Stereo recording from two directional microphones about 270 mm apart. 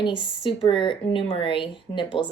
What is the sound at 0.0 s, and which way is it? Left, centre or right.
Speech, centre.